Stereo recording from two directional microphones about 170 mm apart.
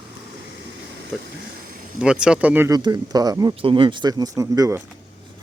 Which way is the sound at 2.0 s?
5° right (ahead or behind).